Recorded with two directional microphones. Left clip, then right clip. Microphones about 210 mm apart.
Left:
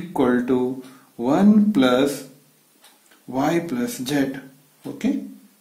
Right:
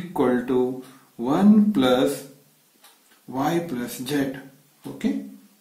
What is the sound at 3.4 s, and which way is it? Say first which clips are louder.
Speech: left 3 dB; 40° left (ahead or behind).